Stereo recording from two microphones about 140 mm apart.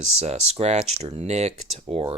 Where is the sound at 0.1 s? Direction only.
50° right (ahead or behind).